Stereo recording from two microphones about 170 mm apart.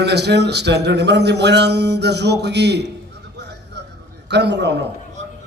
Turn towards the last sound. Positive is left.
turn(degrees=-90)